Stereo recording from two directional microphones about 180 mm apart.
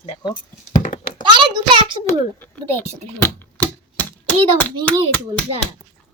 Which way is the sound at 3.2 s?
10° left (ahead or behind).